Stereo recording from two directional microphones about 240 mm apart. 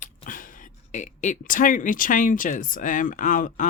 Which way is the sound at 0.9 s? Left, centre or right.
Left.